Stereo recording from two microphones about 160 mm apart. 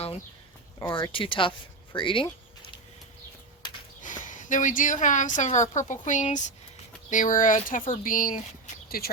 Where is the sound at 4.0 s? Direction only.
55° left (ahead or behind).